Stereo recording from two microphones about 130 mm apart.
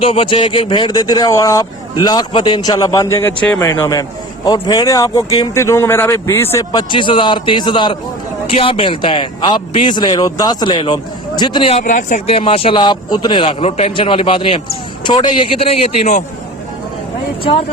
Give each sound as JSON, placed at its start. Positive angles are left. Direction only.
{"t": 0.1, "sound": "a man's voice", "side_deg": 45}
{"t": 2.0, "sound": "speech", "side_deg": 35}
{"t": 6.7, "sound": "a man's voice", "side_deg": 35}
{"t": 8.4, "sound": "a man's voice", "side_deg": 50}
{"t": 11.7, "sound": "speech", "side_deg": 70}
{"t": 12.2, "sound": "a man's voice", "side_deg": 45}
{"t": 17.4, "sound": "a man's voice", "side_deg": 45}